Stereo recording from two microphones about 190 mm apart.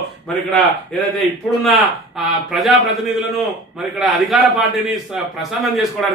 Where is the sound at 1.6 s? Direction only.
Centre (ahead or behind).